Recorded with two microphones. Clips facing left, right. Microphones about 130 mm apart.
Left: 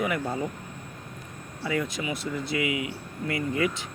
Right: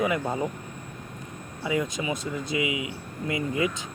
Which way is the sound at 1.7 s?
20° right (ahead or behind).